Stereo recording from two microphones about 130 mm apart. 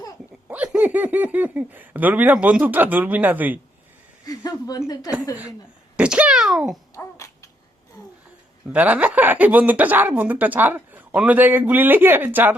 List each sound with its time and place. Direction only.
0.4 s speech: 10° right (ahead or behind)
4.3 s speech: 30° left (ahead or behind)
6.0 s a child's voice: 10° right (ahead or behind)
6.9 s babbling: 25° left (ahead or behind)
8.7 s speech: 10° right (ahead or behind)